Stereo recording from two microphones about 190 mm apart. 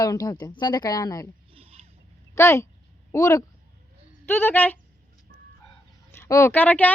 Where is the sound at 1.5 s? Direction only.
30° right (ahead or behind).